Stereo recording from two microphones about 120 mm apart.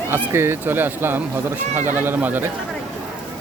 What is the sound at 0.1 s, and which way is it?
Speech, 20° right (ahead or behind).